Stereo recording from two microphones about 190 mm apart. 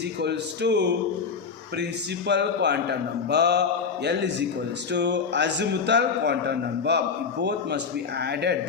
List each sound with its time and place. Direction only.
0.2 s a man's voice: 60° right (ahead or behind)
8.2 s a man's voice: 60° right (ahead or behind)